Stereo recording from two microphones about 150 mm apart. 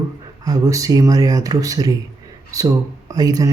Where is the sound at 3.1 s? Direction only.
25° right (ahead or behind).